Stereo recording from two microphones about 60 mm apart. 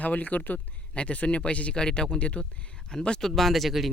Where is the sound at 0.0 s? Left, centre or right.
Left; by 3.9 s centre.